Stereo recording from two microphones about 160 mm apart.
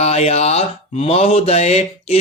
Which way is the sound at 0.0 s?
40° left (ahead or behind).